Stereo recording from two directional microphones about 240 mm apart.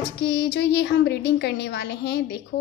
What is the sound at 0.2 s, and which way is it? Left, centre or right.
A woman's voice, left.